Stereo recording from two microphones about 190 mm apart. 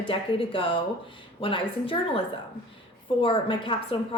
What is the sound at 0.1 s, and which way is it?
A woman's voice, 30° left (ahead or behind).